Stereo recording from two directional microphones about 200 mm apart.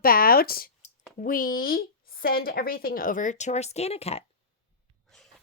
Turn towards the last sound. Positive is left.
turn(degrees=30)  # may be behind; listen again after turning